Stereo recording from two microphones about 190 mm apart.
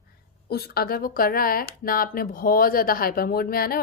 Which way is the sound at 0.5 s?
55° left (ahead or behind).